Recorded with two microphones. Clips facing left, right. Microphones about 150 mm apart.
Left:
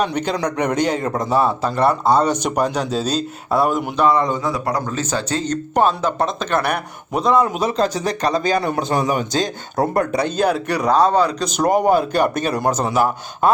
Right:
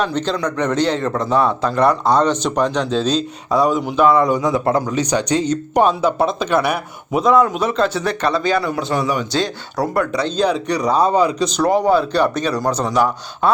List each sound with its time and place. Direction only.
0.0 s speech: 10° left (ahead or behind)
4.3 s speech: 15° right (ahead or behind)
7.5 s a man's voice: 35° left (ahead or behind)
10.4 s speech: 5° left (ahead or behind)
10.9 s speech: 10° right (ahead or behind)
11.4 s speech: 45° left (ahead or behind)